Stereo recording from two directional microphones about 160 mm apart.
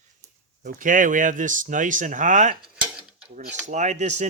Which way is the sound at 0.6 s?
55° right (ahead or behind).